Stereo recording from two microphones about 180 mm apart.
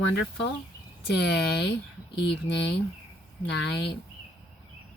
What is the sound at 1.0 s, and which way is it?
Speech, 70° left (ahead or behind).